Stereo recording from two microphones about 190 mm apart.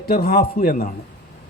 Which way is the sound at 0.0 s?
50° left (ahead or behind).